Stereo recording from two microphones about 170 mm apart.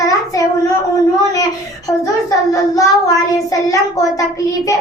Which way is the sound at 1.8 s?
20° left (ahead or behind).